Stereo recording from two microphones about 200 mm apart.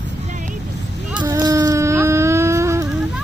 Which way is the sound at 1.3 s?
20° right (ahead or behind).